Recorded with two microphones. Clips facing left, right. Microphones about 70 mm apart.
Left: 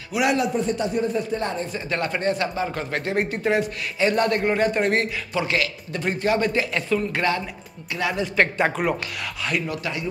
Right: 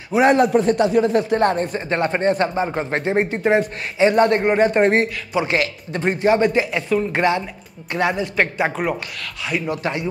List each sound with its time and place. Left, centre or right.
0.1 s a man's voice: right
0.5 s speech: right
1.9 s a man's voice: right; by 7.1 s centre
7.1 s speech: right
8.2 s speech: centre
9.7 s speech: right